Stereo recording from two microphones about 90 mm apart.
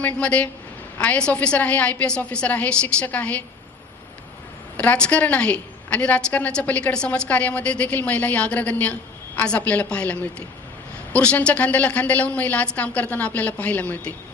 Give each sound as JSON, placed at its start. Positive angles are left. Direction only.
{"t": 0.0, "sound": "a woman's voice", "side_deg": 15}
{"t": 4.8, "sound": "a woman's voice", "side_deg": 10}